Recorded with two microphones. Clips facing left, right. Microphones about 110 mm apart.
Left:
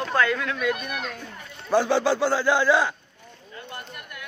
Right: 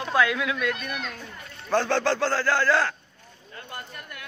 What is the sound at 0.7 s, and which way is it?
A man's voice, 10° left (ahead or behind).